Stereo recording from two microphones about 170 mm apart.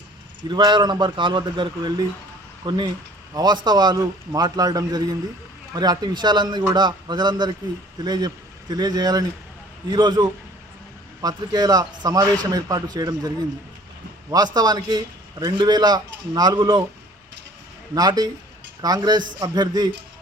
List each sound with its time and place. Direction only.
0.4 s a man's voice: 25° right (ahead or behind)
17.9 s a man's voice: 25° right (ahead or behind)